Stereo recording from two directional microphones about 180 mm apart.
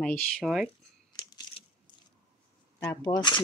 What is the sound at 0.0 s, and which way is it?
Speech, 5° left (ahead or behind).